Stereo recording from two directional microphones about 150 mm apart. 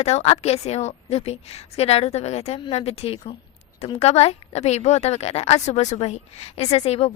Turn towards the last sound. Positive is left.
turn(degrees=40)  # may be behind; listen again after turning